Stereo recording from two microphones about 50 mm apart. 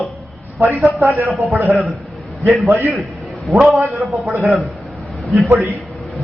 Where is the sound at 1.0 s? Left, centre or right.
Right.